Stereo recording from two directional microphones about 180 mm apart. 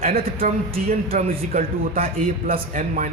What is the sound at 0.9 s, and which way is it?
A man's voice, 40° right (ahead or behind).